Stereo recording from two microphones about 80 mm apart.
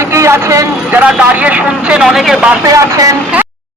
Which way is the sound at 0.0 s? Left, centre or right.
Right.